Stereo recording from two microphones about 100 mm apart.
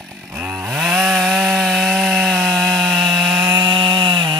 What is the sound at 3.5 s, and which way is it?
Chainsaw, 50° right (ahead or behind).